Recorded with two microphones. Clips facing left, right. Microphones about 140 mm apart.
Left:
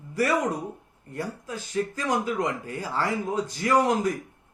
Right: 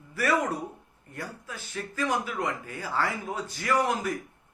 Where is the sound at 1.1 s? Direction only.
20° left (ahead or behind).